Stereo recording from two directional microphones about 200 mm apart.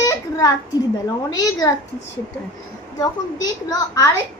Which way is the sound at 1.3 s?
20° left (ahead or behind).